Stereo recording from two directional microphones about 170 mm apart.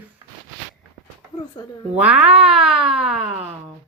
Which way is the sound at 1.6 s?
25° left (ahead or behind).